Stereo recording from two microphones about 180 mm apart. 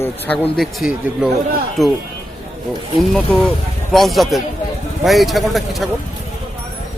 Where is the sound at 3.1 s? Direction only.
Centre (ahead or behind).